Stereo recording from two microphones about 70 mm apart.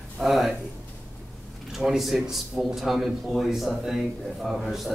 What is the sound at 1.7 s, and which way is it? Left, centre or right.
A man's voice, centre.